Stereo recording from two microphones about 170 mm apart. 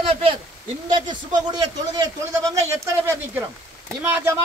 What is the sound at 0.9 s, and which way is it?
A man's voice, 25° right (ahead or behind).